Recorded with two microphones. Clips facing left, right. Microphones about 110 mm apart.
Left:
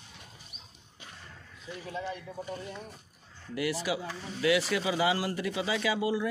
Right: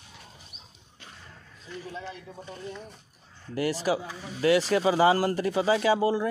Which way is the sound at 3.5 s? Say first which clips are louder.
Right 4 dB; 35° right (ahead or behind).